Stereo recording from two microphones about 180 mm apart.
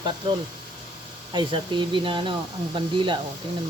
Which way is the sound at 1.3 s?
25° right (ahead or behind).